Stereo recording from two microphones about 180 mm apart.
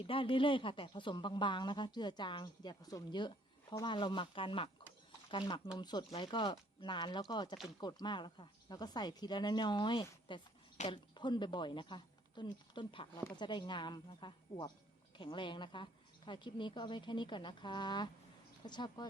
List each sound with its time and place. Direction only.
0.1 s speech: 30° left (ahead or behind)